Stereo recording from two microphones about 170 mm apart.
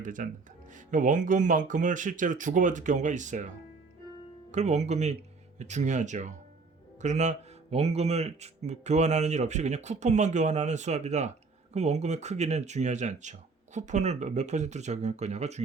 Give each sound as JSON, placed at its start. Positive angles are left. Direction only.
{"t": 0.0, "sound": "speech", "side_deg": -50}
{"t": 4.5, "sound": "speech", "side_deg": -40}